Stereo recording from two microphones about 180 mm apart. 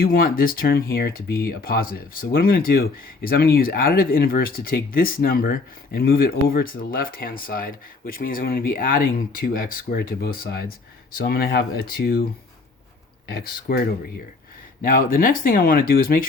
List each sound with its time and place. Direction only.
0.0 s speech: 55° left (ahead or behind)